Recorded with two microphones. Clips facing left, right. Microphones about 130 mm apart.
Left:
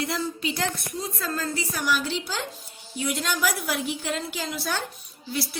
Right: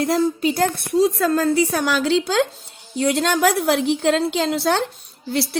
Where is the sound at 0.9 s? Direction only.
80° right.